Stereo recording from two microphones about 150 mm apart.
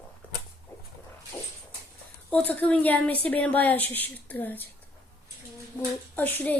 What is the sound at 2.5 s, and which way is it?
A woman's voice, 10° left (ahead or behind).